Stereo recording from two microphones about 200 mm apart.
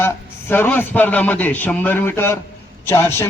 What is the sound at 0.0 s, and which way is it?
Speech, 10° left (ahead or behind).